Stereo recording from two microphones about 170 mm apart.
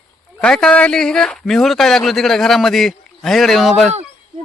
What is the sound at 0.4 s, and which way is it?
A man's voice, 5° left (ahead or behind).